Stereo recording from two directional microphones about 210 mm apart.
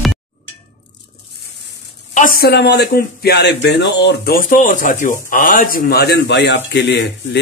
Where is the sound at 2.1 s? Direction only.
40° left (ahead or behind).